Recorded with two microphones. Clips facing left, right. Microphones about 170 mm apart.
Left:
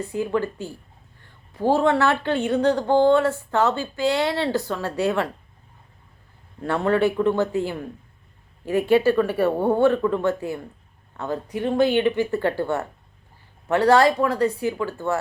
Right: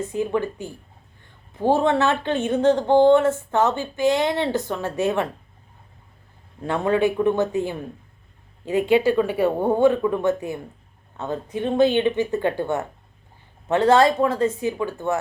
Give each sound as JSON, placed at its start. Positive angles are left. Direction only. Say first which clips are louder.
{"t": 0.0, "sound": "speech", "louder": "right 1 dB", "side_deg": -20}
{"t": 6.7, "sound": "speech", "louder": "even", "side_deg": -15}